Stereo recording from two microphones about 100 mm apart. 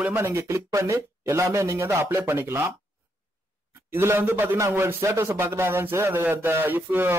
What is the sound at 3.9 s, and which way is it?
Speech, 25° right (ahead or behind).